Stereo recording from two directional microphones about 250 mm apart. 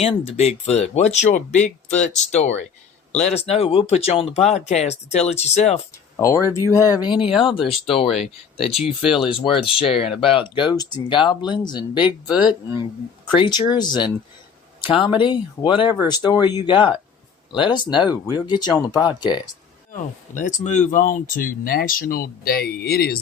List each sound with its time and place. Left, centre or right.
0.0 s speech: left
6.1 s speech: centre
12.3 s speech: centre
13.3 s speech: centre
19.9 s speech: left